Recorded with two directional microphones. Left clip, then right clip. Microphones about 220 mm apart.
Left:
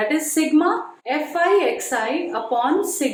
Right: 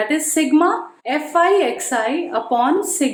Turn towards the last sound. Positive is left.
turn(degrees=-50)  # may be behind; listen again after turning